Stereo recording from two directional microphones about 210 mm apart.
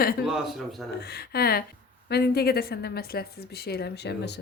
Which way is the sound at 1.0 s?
50° left (ahead or behind).